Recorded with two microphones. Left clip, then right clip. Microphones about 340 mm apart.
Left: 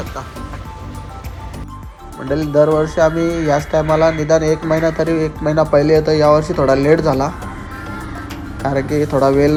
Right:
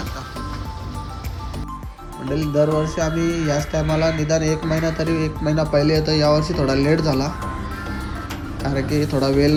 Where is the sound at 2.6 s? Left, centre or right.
Left.